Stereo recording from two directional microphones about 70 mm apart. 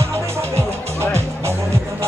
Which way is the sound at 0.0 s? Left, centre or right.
Right.